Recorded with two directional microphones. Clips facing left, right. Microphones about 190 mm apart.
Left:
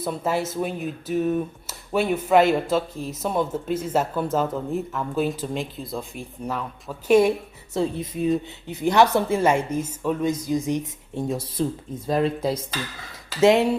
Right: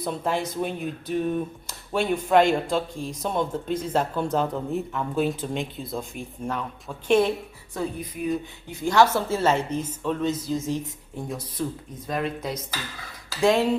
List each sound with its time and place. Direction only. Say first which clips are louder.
0.0 s speech: left 2 dB; 5° left (ahead or behind)
7.7 s a woman's voice: left 5 dB; 25° left (ahead or behind)
13.4 s speech: left 4 dB; 20° left (ahead or behind)